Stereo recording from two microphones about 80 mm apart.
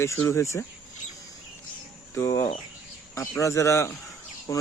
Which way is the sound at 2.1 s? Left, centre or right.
Left.